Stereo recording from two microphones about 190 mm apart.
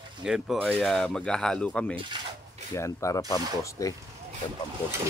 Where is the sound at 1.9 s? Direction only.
30° right (ahead or behind).